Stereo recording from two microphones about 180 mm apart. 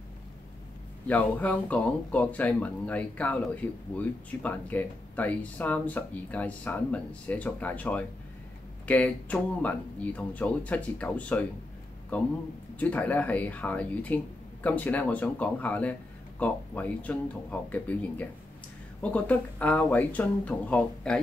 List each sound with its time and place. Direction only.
1.0 s speech: 10° left (ahead or behind)